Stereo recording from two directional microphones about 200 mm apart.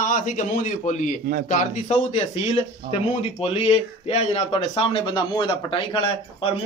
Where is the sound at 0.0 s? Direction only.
40° left (ahead or behind).